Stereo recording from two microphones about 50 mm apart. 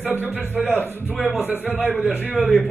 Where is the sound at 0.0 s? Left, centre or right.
Left.